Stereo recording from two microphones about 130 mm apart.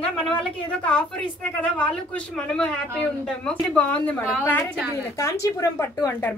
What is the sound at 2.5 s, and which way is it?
Speech, 5° left (ahead or behind).